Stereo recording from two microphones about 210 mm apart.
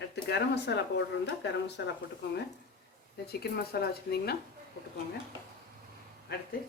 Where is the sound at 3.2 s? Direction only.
50° left (ahead or behind).